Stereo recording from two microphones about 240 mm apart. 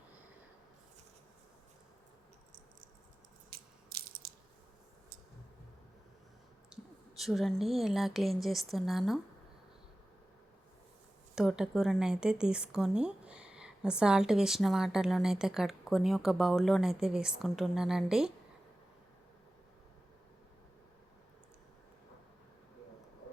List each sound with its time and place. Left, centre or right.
3.5 s ratchet: right
6.7 s a sound: centre
7.2 s a woman's voice: centre
11.3 s a woman's voice: centre